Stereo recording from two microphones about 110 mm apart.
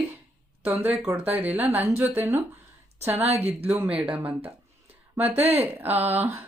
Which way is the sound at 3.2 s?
70° right (ahead or behind).